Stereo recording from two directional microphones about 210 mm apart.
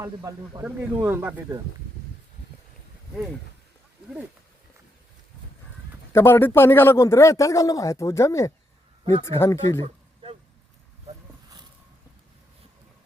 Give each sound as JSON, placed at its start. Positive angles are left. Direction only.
{"t": 0.0, "sound": "speech", "side_deg": -15}
{"t": 6.1, "sound": "speech", "side_deg": 10}
{"t": 9.8, "sound": "a sound", "side_deg": -25}